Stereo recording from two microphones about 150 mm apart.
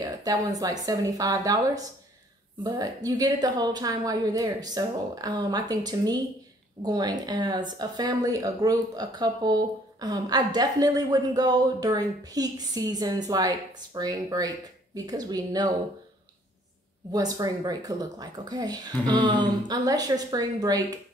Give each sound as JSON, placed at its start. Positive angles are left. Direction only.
{"t": 0.0, "sound": "speech", "side_deg": -25}
{"t": 17.1, "sound": "speech", "side_deg": -25}